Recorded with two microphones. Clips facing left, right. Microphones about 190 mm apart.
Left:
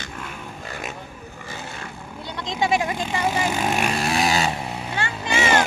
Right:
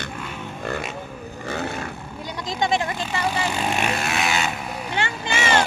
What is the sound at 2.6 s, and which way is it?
Speech, 10° left (ahead or behind).